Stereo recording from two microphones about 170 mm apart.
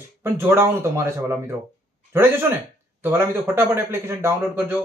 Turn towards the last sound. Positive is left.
turn(degrees=-15)  # may be behind; listen again after turning